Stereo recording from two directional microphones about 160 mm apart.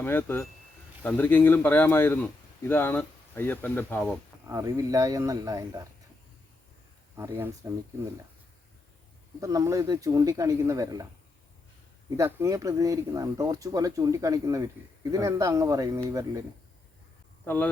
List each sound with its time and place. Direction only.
0.0 s speech: 10° left (ahead or behind)
4.4 s speech: 20° right (ahead or behind)
7.2 s speech: 15° right (ahead or behind)
9.4 s speech: 20° right (ahead or behind)
12.1 s speech: 20° right (ahead or behind)
17.4 s speech: 10° left (ahead or behind)